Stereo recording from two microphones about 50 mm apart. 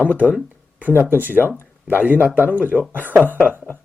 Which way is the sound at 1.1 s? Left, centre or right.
Right.